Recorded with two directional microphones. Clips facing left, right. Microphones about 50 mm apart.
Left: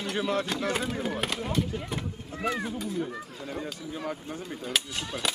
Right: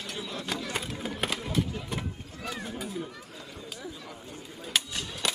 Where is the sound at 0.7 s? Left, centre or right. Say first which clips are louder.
Left 5 dB; centre.